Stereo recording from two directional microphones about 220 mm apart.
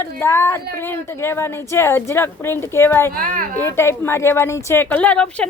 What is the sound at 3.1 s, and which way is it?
Speech, 40° right (ahead or behind).